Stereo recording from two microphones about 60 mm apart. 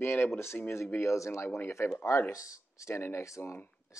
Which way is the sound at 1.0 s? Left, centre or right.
Left.